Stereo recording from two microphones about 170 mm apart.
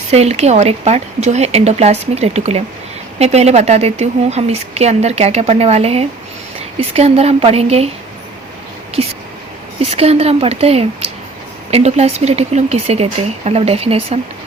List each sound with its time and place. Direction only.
0.1 s a woman's voice: 40° right (ahead or behind)
9.0 s a woman's voice: 35° right (ahead or behind)